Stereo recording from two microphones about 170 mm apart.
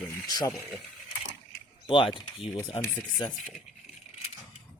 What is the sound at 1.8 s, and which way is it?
Speech, 30° left (ahead or behind).